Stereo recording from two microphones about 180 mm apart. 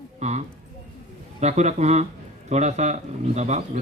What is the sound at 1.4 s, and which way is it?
A man's voice, 40° right (ahead or behind).